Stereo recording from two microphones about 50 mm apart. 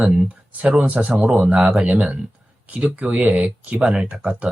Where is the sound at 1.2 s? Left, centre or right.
Centre.